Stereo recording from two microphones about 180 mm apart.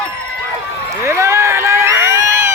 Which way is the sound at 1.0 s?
15° right (ahead or behind).